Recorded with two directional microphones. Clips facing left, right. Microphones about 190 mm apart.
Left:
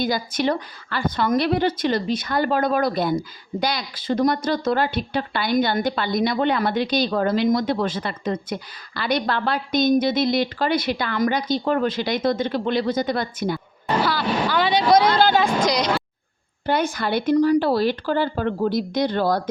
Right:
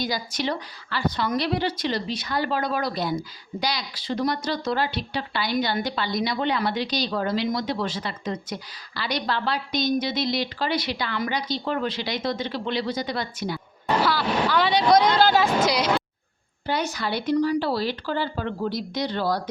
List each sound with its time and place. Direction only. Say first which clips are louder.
0.0 s speech: left 5 dB; 50° left (ahead or behind)
13.8 s speech: left 1 dB; centre (ahead or behind)
16.6 s speech: left 5 dB; 55° left (ahead or behind)